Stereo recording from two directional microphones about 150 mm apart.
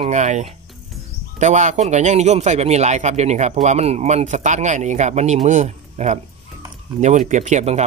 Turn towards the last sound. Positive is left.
turn(degrees=-50)  # may be behind; listen again after turning